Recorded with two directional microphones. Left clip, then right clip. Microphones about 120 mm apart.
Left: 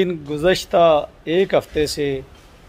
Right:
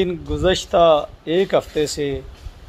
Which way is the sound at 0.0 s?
35° left (ahead or behind).